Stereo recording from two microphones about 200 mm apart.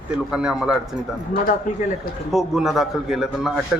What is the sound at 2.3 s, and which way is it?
A man's voice, centre (ahead or behind).